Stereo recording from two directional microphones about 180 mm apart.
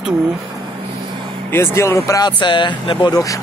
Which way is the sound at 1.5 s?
15° left (ahead or behind).